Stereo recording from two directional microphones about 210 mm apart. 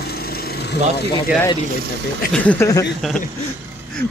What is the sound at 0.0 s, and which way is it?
Lawn mower, 45° left (ahead or behind).